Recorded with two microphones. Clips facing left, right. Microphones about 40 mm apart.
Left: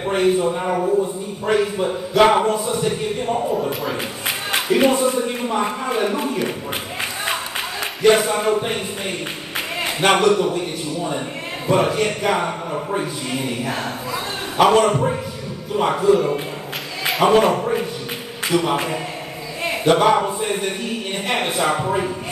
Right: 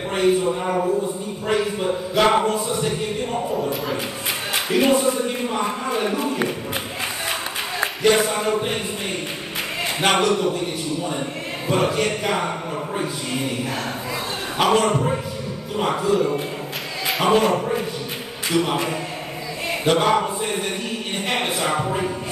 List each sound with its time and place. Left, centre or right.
0.0 s a sound: centre
0.4 s a man's voice: centre
7.8 s speech: centre
9.9 s a man's voice: centre
14.6 s a man's voice: centre